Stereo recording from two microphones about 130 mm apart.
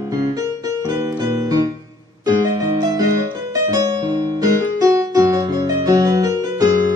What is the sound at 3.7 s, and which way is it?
Music, 30° right (ahead or behind).